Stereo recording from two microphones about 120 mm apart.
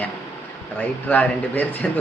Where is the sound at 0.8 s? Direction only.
10° left (ahead or behind).